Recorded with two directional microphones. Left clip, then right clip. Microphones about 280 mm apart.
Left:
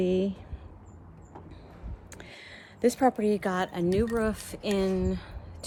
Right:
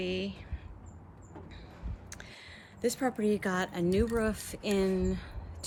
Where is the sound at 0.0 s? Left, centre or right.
Centre.